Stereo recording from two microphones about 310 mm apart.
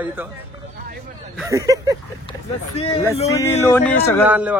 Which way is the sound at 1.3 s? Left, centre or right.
Centre.